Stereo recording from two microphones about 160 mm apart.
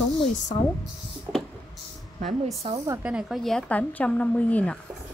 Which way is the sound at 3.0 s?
5° right (ahead or behind).